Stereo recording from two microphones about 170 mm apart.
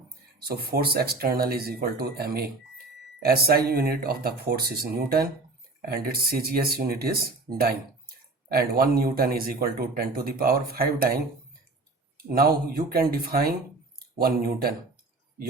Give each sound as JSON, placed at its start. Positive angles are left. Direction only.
{"t": 0.4, "sound": "speech", "side_deg": -65}